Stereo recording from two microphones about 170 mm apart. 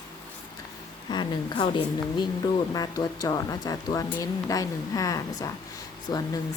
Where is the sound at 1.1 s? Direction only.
25° left (ahead or behind).